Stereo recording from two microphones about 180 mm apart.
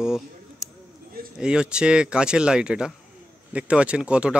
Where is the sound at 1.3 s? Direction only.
5° right (ahead or behind).